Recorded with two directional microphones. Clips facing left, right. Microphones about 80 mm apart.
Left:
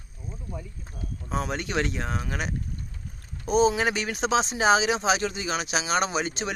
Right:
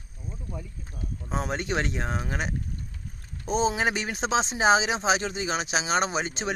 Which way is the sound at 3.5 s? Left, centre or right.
Right.